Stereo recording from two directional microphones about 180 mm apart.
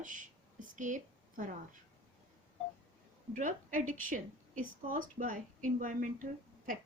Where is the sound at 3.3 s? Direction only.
45° right (ahead or behind).